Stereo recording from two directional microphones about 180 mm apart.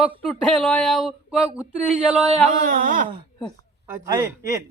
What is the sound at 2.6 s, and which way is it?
Speech, 45° right (ahead or behind).